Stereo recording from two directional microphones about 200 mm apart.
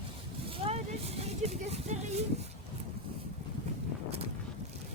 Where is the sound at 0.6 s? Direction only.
30° right (ahead or behind).